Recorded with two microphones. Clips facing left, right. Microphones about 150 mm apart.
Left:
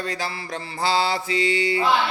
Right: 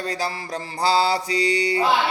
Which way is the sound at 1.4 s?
25° left (ahead or behind).